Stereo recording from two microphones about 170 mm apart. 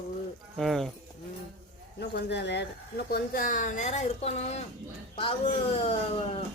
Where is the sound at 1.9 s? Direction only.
85° left.